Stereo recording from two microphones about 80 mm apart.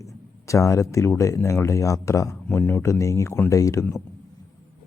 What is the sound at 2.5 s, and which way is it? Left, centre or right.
Speech, left.